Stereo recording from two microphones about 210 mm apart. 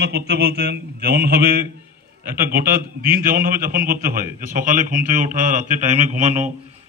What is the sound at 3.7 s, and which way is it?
Mantra, 45° right (ahead or behind).